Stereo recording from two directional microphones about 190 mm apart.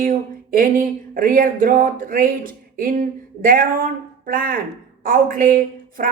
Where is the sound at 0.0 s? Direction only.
45° right (ahead or behind).